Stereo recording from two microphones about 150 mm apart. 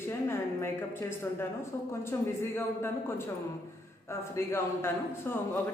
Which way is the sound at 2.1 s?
20° left (ahead or behind).